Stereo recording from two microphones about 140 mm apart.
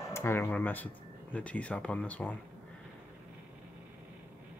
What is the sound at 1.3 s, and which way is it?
Speech, 10° left (ahead or behind).